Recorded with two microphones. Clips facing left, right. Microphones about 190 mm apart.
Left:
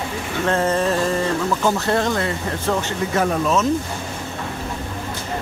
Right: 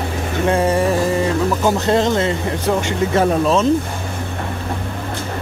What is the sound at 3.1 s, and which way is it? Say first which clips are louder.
Speech: right 4 dB; 30° right (ahead or behind).